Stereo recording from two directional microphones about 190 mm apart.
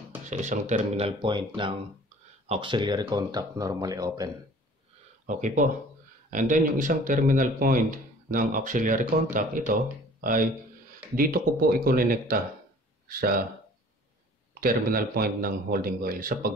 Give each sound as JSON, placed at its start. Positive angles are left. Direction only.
{"t": 0.3, "sound": "speech", "side_deg": -40}
{"t": 5.2, "sound": "a man's voice", "side_deg": -40}
{"t": 14.5, "sound": "a man's voice", "side_deg": -50}